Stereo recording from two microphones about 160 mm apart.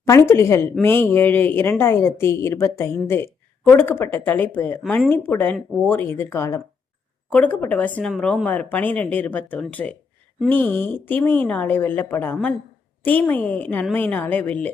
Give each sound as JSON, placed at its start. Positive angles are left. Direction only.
{"t": 0.0, "sound": "a woman's voice", "side_deg": 15}